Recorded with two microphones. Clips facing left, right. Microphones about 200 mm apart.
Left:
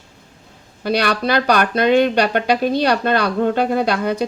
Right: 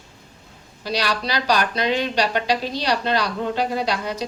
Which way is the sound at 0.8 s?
60° left (ahead or behind).